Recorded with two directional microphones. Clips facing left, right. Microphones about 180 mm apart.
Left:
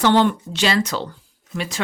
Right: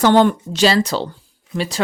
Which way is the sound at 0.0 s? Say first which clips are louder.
Right 3 dB; 45° right (ahead or behind).